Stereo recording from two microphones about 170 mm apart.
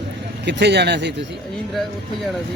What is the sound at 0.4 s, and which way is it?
Speech, 80° right.